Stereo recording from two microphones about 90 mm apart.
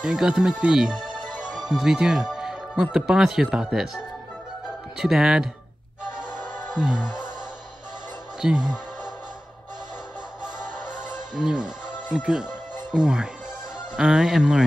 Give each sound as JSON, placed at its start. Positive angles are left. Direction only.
{"t": 0.0, "sound": "speech", "side_deg": -10}
{"t": 1.0, "sound": "music", "side_deg": -55}
{"t": 1.5, "sound": "speech", "side_deg": -5}
{"t": 4.9, "sound": "speech", "side_deg": -5}
{"t": 6.7, "sound": "music", "side_deg": -10}
{"t": 8.4, "sound": "speech", "side_deg": -10}
{"t": 11.3, "sound": "speech", "side_deg": -5}